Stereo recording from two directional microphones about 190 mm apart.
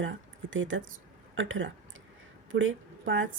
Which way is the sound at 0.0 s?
80° right.